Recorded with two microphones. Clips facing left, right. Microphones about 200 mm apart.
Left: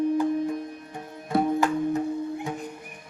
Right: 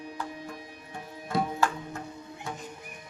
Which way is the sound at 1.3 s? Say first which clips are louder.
Left 6 dB; 55° left (ahead or behind).